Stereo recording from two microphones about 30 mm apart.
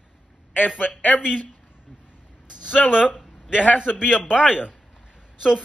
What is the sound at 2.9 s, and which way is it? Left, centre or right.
Speech, right.